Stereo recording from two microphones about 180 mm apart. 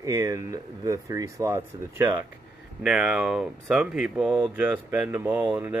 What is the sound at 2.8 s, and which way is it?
Speech, 5° right (ahead or behind).